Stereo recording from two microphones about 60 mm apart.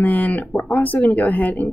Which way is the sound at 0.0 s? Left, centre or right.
Left.